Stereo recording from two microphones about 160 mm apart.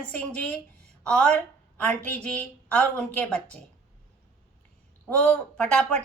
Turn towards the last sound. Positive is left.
turn(degrees=5)  # may be behind; listen again after turning